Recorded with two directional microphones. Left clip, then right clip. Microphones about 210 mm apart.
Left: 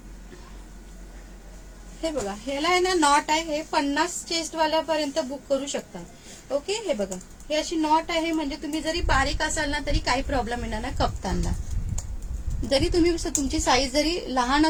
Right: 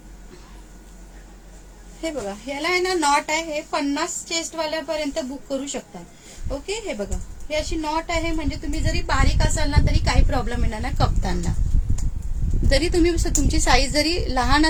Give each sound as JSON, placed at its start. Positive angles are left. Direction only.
{"t": 2.0, "sound": "a woman's voice", "side_deg": -10}
{"t": 6.7, "sound": "a woman's voice", "side_deg": -5}
{"t": 12.6, "sound": "a woman's voice", "side_deg": -15}